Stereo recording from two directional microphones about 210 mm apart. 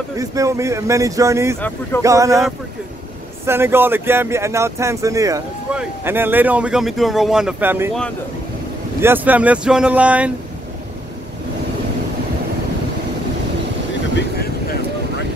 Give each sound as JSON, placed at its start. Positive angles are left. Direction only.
{"t": 0.2, "sound": "speech", "side_deg": -15}
{"t": 3.4, "sound": "speech", "side_deg": -10}
{"t": 9.0, "sound": "speech", "side_deg": -10}
{"t": 14.1, "sound": "vehicle", "side_deg": 50}